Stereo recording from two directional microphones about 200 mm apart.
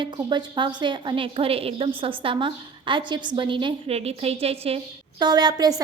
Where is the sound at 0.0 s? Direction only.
25° right (ahead or behind).